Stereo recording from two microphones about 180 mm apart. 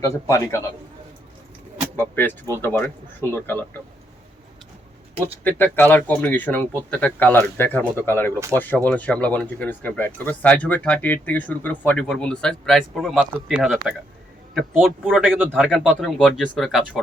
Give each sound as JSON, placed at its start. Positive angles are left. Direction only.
{"t": 0.0, "sound": "speech", "side_deg": 15}
{"t": 2.0, "sound": "speech", "side_deg": 10}
{"t": 5.4, "sound": "speech", "side_deg": 10}